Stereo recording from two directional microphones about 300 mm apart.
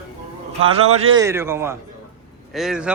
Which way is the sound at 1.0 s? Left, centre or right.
Centre.